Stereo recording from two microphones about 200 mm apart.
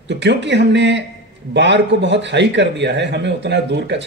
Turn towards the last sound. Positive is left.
turn(degrees=-60)  # may be behind; listen again after turning